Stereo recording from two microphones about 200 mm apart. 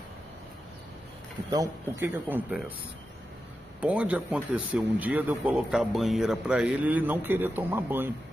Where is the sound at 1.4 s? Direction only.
15° right (ahead or behind).